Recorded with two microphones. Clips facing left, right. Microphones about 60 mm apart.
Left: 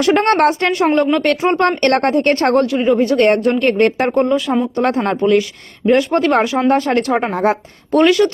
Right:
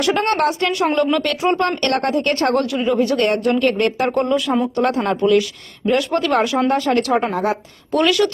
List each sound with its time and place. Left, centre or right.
0.0 s speech: left